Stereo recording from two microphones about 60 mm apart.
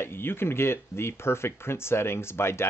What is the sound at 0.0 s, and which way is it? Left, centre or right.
Speech, left.